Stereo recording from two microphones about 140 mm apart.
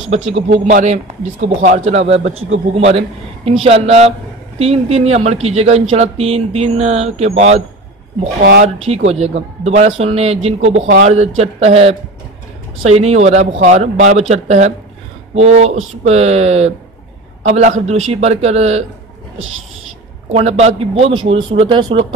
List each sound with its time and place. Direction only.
0.1 s speech: 45° right (ahead or behind)
0.7 s speech: 60° right (ahead or behind)
1.9 s speech: 50° right (ahead or behind)
8.6 s speech: 50° right (ahead or behind)
11.1 s speech: 50° right (ahead or behind)
20.2 s speech: 50° right (ahead or behind)